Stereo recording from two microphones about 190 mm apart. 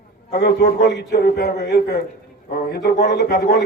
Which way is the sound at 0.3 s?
60° left (ahead or behind).